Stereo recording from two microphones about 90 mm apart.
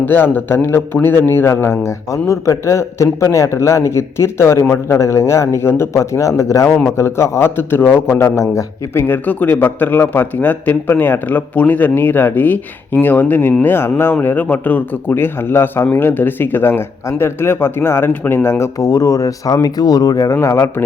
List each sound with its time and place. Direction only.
0.0 s speech: 20° left (ahead or behind)
9.0 s speech: 20° left (ahead or behind)
18.8 s speech: 40° left (ahead or behind)
20.3 s speech: 30° left (ahead or behind)